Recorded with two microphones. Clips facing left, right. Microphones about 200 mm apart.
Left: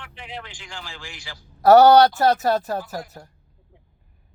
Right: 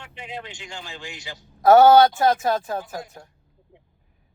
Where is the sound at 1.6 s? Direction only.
Centre (ahead or behind).